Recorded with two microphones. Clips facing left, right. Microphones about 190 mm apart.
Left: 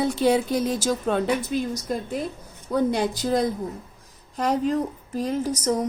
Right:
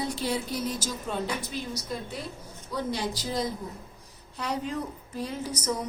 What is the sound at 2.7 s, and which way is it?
A woman's voice, 55° left (ahead or behind).